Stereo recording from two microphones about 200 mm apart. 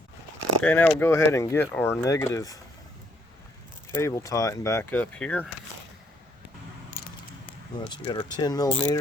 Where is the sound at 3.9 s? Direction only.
15° left (ahead or behind).